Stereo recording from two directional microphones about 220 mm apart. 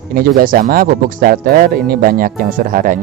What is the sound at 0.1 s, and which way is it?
Speech, 40° right (ahead or behind).